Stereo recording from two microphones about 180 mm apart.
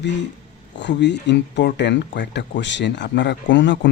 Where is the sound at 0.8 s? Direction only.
75° left (ahead or behind).